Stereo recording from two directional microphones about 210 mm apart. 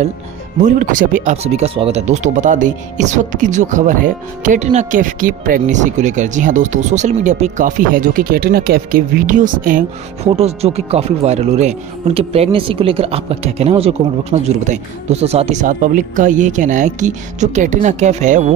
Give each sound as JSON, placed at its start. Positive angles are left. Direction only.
{"t": 0.6, "sound": "speech", "side_deg": -35}